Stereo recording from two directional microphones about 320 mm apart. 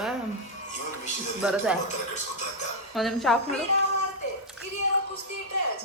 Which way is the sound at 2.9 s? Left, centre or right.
Centre.